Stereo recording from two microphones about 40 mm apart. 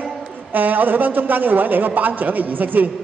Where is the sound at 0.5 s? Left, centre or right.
Right.